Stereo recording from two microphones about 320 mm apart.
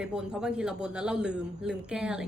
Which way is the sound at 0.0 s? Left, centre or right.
Centre.